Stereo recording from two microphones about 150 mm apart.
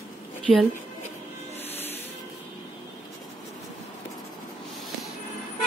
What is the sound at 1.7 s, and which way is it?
Music, 15° left (ahead or behind).